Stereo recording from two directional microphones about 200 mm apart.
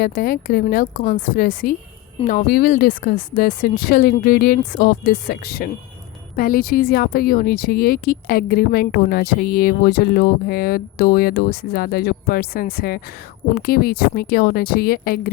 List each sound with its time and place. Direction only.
0.0 s speech: 45° left (ahead or behind)